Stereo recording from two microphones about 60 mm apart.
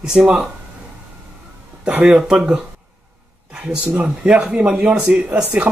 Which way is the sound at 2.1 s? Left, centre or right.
Centre.